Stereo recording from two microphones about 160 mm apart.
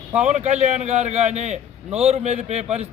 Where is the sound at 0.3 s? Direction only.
45° right (ahead or behind).